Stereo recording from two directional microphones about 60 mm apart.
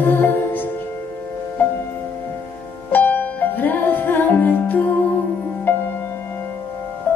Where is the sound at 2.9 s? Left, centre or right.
Left.